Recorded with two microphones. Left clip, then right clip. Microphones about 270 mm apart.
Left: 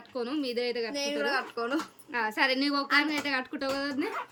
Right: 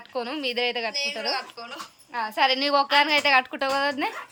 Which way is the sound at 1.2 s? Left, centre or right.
Left.